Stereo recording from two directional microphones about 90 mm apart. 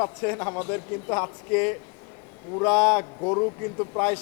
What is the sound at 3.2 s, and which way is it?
Speech, 35° left (ahead or behind).